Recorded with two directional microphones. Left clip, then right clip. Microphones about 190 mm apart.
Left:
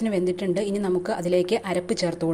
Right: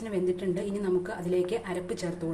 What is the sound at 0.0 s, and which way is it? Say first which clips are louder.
A woman's voice: left 5 dB; 45° left (ahead or behind).